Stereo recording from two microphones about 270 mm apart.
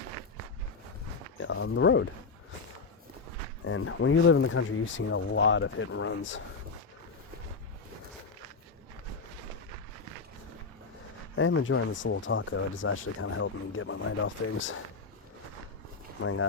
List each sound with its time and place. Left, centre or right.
1.4 s speech: left
3.6 s speech: left
11.3 s speech: left
16.2 s speech: left